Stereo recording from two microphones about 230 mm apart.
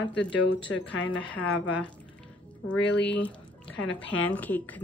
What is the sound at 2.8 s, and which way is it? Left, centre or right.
Speech, left.